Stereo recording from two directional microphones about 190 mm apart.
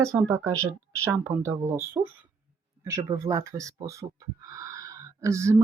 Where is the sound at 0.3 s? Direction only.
15° right (ahead or behind).